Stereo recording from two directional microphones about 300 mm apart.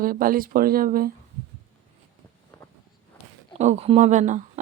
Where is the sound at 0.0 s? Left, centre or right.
Right.